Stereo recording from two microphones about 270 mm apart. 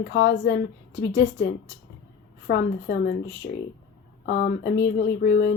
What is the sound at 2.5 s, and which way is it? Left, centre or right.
Speech, left.